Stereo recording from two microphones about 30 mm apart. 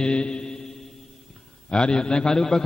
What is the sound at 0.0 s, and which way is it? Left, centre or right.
Mantra, left.